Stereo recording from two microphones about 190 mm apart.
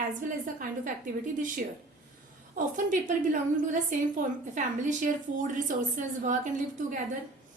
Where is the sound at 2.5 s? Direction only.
45° right (ahead or behind).